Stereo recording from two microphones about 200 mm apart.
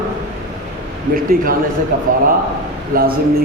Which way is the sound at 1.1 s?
45° right (ahead or behind).